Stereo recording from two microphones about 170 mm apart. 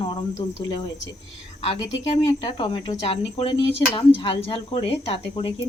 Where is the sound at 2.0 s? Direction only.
35° left (ahead or behind).